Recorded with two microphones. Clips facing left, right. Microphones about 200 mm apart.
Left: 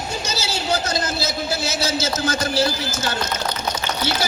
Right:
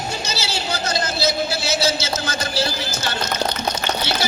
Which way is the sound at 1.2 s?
45° left (ahead or behind).